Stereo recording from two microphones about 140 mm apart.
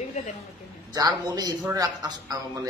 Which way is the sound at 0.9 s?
30° right (ahead or behind).